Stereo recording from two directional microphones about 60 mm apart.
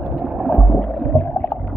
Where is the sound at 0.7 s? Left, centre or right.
Centre.